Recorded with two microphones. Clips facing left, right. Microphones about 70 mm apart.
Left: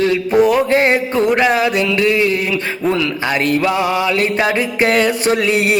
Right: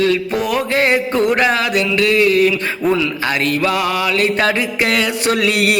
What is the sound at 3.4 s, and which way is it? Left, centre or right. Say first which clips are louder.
Music: left 4 dB; left.